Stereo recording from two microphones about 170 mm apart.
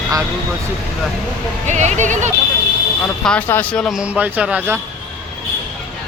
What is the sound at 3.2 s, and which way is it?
Speech, 10° left (ahead or behind).